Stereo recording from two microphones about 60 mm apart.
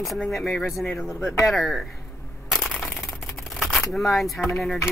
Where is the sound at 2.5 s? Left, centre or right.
Centre.